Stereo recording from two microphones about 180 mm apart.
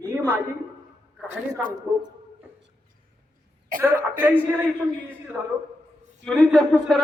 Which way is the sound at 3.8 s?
10° right (ahead or behind).